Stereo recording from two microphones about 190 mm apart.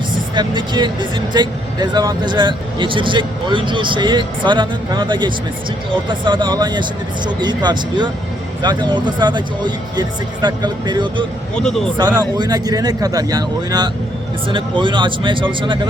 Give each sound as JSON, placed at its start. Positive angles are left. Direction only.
{"t": 0.3, "sound": "speech", "side_deg": -25}
{"t": 11.5, "sound": "speech", "side_deg": 5}
{"t": 11.9, "sound": "speech", "side_deg": -20}